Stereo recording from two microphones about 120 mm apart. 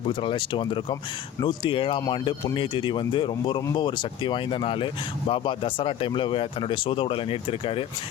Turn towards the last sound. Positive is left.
turn(degrees=50)  # may be behind; listen again after turning